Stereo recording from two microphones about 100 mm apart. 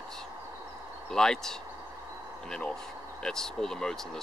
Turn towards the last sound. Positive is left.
turn(degrees=5)  # may be behind; listen again after turning